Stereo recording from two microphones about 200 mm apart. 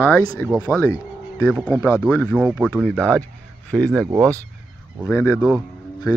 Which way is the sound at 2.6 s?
5° left (ahead or behind).